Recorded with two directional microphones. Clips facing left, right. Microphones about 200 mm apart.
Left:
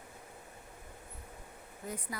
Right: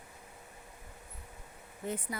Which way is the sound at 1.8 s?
25° right (ahead or behind).